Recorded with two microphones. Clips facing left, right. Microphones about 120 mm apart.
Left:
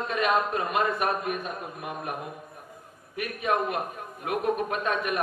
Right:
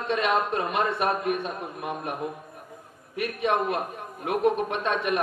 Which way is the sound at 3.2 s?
30° right (ahead or behind).